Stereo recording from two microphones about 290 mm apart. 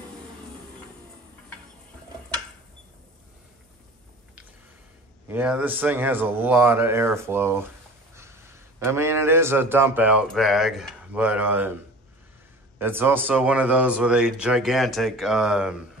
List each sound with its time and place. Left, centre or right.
5.3 s a man's voice: centre
12.7 s speech: centre